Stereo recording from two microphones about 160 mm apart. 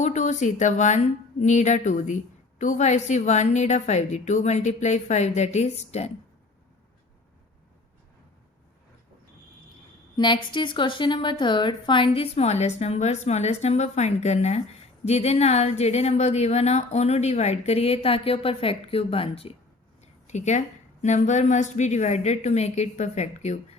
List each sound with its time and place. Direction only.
0.0 s a woman's voice: 50° left (ahead or behind)
10.2 s a woman's voice: 30° left (ahead or behind)
20.2 s a woman's voice: 45° left (ahead or behind)